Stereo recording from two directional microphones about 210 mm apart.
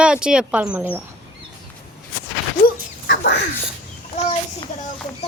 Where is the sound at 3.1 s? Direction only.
55° left (ahead or behind).